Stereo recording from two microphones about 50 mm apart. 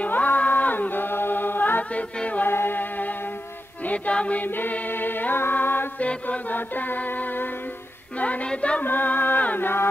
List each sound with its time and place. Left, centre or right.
0.0 s a capella: left
2.1 s music: left
2.4 s music: left
3.8 s choir: left
5.9 s choir: left
8.5 s music: left
8.8 s choir: left